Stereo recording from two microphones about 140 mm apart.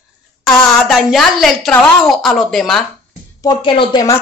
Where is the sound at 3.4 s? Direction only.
35° left (ahead or behind).